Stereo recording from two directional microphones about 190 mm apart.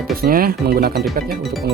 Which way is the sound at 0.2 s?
50° right (ahead or behind).